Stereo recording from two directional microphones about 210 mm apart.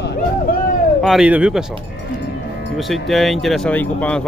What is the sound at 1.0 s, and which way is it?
Speech, centre (ahead or behind).